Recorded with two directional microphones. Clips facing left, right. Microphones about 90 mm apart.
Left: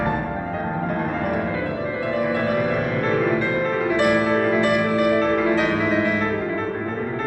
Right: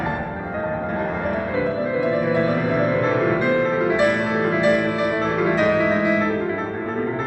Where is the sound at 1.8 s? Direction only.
20° right (ahead or behind).